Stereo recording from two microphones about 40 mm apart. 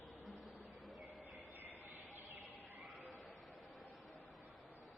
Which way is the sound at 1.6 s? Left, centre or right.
Right.